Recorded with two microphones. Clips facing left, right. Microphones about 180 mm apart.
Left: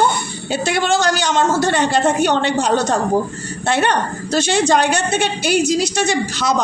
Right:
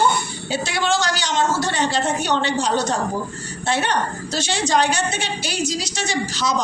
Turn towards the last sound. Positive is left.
turn(degrees=55)  # may be behind; listen again after turning